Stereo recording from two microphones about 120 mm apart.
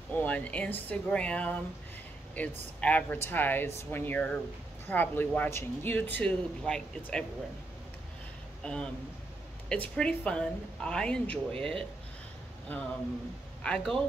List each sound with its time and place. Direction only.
0.1 s speech: 15° left (ahead or behind)
8.6 s speech: 10° left (ahead or behind)